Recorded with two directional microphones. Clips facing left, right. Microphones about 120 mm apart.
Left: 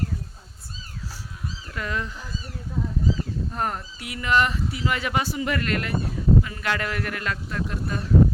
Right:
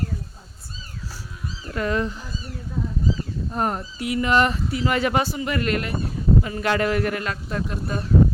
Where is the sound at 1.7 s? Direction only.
35° right (ahead or behind).